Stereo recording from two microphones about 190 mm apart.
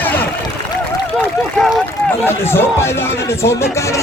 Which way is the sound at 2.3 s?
10° left (ahead or behind).